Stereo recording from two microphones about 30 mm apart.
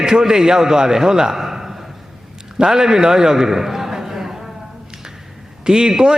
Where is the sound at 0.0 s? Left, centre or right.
Right.